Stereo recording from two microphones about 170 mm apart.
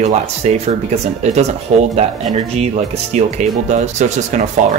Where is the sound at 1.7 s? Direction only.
40° right (ahead or behind).